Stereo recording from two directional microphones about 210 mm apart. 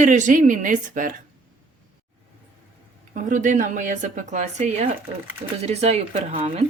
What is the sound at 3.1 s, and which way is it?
A woman's voice, 35° right (ahead or behind).